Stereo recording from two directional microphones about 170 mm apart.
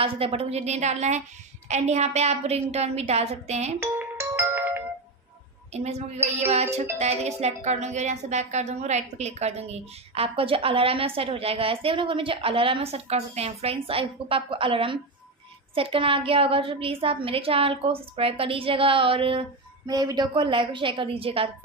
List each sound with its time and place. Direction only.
0.0 s a woman's voice: 35° right (ahead or behind)
3.8 s music: 15° right (ahead or behind)
5.7 s a woman's voice: 40° right (ahead or behind)